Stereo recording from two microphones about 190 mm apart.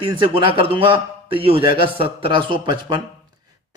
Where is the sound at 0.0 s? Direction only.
25° right (ahead or behind).